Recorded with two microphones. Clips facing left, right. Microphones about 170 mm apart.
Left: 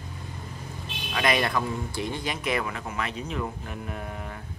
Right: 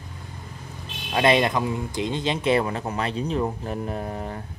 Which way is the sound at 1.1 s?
25° right (ahead or behind).